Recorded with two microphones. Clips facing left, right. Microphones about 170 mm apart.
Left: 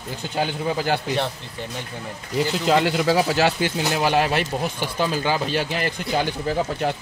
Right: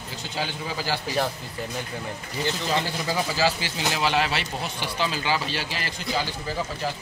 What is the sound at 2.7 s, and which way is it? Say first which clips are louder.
Speech: left 8 dB; 70° left (ahead or behind).